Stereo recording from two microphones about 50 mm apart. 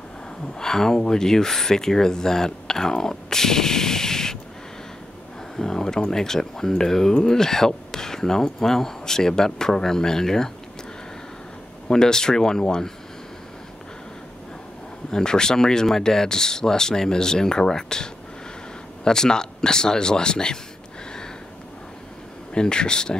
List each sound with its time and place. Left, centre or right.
0.6 s speech: centre
5.6 s speech: centre
11.9 s speech: centre
15.0 s speech: centre
22.5 s speech: centre